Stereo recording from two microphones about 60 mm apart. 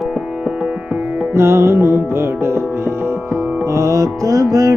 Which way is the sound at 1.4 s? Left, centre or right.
Right.